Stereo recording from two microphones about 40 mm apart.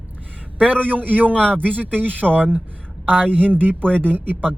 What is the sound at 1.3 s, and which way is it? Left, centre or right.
Speech, left.